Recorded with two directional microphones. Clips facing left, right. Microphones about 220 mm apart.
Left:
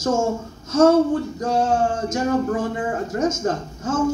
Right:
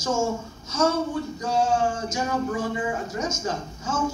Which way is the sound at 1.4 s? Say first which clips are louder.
Left 1 dB; 60° left (ahead or behind).